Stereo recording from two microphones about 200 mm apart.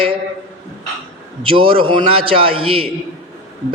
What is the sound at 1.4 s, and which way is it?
A man's voice, 25° right (ahead or behind).